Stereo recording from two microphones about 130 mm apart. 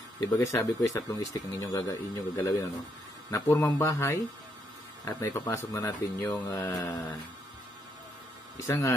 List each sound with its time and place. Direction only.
0.3 s speech: 20° left (ahead or behind)
8.5 s speech: 25° left (ahead or behind)